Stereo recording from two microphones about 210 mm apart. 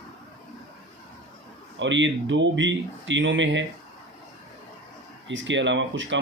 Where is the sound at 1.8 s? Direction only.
60° right (ahead or behind).